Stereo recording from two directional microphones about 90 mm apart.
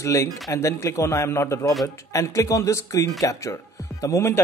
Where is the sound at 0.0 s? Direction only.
35° left (ahead or behind).